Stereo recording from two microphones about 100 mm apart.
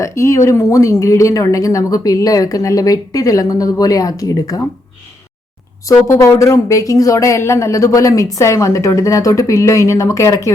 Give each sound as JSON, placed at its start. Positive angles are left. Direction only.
{"t": 0.0, "sound": "speech", "side_deg": 30}
{"t": 5.9, "sound": "speech", "side_deg": 30}